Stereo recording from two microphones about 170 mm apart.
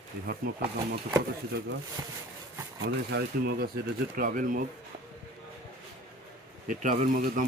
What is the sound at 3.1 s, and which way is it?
Speech, 70° right (ahead or behind).